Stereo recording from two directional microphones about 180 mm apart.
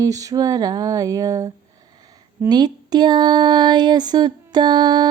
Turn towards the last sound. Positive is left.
turn(degrees=-25)  # may be behind; listen again after turning